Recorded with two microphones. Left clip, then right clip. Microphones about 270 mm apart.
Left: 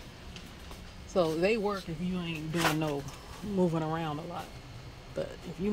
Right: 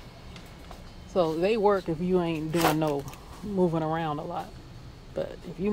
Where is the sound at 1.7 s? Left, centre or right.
Centre.